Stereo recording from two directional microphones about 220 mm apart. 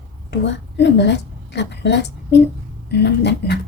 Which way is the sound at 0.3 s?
50° left (ahead or behind).